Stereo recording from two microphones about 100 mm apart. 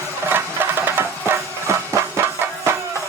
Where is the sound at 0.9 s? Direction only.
20° right (ahead or behind).